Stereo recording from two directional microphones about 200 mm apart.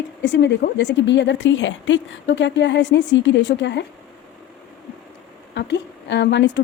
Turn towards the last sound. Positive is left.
turn(degrees=60)  # may be behind; listen again after turning